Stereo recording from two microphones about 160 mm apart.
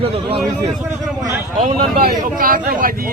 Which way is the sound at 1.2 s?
55° right (ahead or behind).